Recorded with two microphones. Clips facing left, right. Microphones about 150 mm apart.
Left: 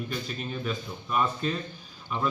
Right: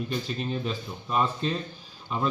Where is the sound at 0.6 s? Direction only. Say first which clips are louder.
Even; 25° right (ahead or behind).